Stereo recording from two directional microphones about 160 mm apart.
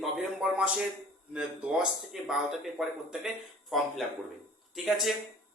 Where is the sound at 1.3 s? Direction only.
5° right (ahead or behind).